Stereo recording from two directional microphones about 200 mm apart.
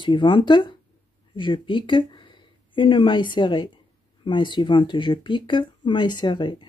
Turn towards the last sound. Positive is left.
turn(degrees=25)  # may be behind; listen again after turning